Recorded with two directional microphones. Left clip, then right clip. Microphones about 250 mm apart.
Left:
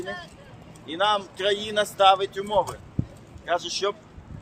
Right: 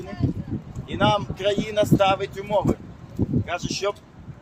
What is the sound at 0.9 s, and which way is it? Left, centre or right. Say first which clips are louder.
A man's voice: right 2 dB; centre.